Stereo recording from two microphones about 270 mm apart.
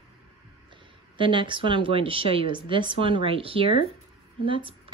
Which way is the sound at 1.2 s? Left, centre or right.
Centre.